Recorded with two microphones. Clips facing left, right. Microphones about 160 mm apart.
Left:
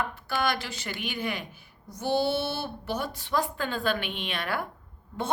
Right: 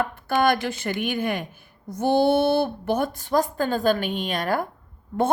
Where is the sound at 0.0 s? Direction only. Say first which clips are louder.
Right 7 dB; 50° right (ahead or behind).